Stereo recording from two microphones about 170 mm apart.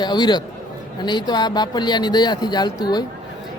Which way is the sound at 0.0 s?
25° left (ahead or behind).